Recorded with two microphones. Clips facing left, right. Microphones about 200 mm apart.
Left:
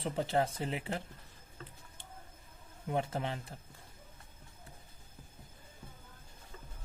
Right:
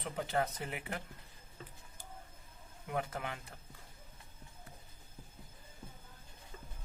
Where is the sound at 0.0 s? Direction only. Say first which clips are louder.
Left 3 dB; 30° left (ahead or behind).